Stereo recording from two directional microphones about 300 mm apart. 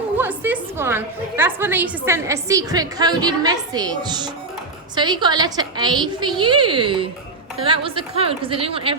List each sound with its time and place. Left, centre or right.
0.2 s a woman's voice: centre